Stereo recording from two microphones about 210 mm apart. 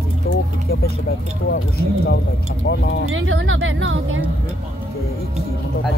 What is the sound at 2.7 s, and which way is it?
Speech, 50° left (ahead or behind).